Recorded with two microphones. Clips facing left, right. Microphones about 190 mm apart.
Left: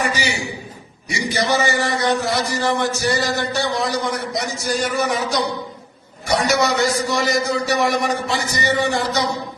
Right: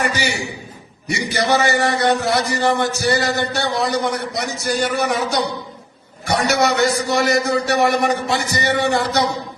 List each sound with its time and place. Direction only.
0.0 s a man's voice: 60° right (ahead or behind)